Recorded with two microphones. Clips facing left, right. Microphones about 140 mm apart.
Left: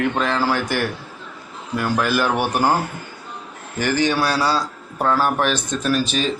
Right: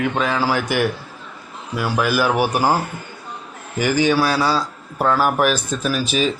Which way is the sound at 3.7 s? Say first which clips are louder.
Right 2 dB; 10° right (ahead or behind).